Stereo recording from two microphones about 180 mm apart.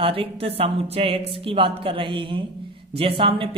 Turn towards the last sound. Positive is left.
turn(degrees=-30)  # may be behind; listen again after turning